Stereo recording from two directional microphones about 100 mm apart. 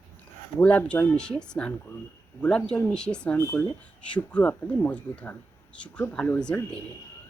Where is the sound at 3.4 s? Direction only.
20° left (ahead or behind).